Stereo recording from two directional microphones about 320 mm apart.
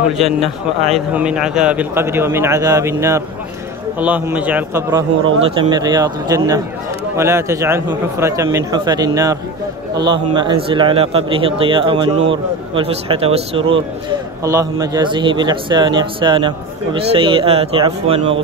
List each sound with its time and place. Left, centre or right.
0.9 s a man's voice: centre